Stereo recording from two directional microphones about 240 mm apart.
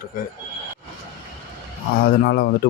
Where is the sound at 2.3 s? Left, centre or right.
Left.